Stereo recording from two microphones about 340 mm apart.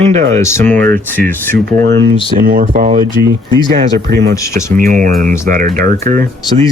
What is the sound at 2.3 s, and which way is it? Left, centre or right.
Speech, right.